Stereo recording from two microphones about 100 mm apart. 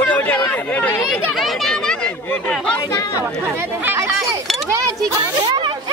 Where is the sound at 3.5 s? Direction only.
25° right (ahead or behind).